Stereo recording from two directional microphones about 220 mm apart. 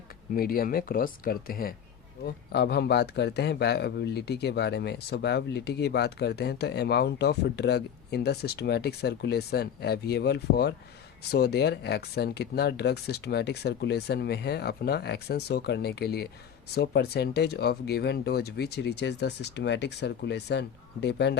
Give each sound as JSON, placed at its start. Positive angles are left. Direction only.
{"t": 0.3, "sound": "speech", "side_deg": 40}